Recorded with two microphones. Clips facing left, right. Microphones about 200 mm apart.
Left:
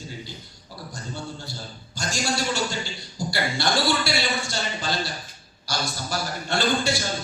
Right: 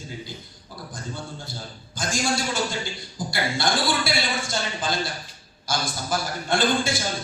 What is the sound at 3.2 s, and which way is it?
A man's voice, 50° right (ahead or behind).